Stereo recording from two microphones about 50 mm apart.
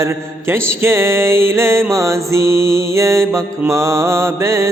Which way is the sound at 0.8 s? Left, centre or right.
Right.